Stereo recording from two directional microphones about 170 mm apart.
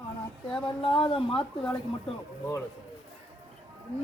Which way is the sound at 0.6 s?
30° left (ahead or behind).